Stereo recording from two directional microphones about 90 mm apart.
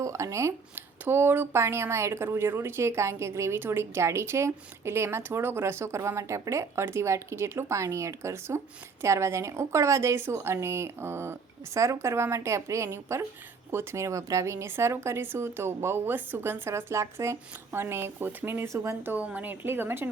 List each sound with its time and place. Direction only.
0.0 s speech: 35° right (ahead or behind)
19.1 s speech: 15° right (ahead or behind)